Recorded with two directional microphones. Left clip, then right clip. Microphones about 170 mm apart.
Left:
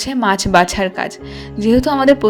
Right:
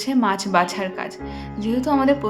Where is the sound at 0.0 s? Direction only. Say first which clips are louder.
Left 5 dB; 40° left (ahead or behind).